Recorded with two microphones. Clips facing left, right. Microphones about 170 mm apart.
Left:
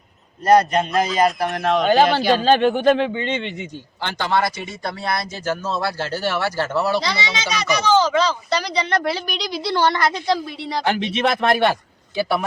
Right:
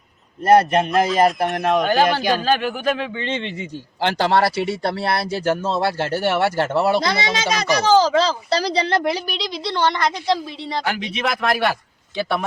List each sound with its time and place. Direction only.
0.9 s a woman's voice: centre (ahead or behind)
1.5 s speech: 20° right (ahead or behind)
1.8 s speech: 20° left (ahead or behind)
3.2 s a woman's voice: centre (ahead or behind)
4.0 s a child's voice: 35° right (ahead or behind)
7.0 s a child's voice: 50° right (ahead or behind); by 9.1 s 25° right (ahead or behind)
9.6 s a woman's voice: 5° left (ahead or behind)
10.8 s speech: 30° left (ahead or behind)
12.1 s a woman's voice: 5° left (ahead or behind)